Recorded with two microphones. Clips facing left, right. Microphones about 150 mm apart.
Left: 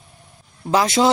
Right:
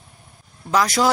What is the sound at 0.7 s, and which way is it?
Speech, 25° left (ahead or behind).